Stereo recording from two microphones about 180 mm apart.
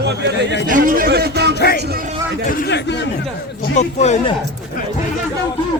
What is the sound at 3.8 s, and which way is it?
Speech, 40° left (ahead or behind).